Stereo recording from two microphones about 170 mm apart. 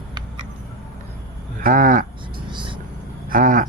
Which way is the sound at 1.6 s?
50° right (ahead or behind).